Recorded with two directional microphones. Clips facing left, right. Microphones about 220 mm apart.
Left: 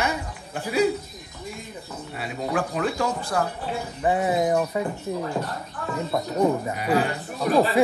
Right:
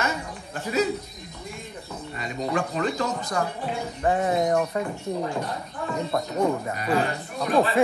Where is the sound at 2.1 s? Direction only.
5° left (ahead or behind).